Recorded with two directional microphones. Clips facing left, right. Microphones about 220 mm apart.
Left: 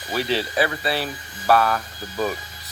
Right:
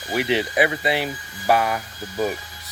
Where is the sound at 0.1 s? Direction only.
20° right (ahead or behind).